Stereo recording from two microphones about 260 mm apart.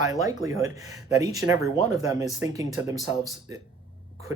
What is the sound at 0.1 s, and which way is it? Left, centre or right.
A man's voice, centre.